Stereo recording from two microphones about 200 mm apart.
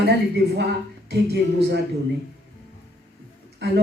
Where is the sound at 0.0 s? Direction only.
55° right (ahead or behind).